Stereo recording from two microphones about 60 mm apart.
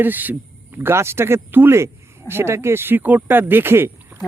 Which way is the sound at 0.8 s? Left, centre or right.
Right.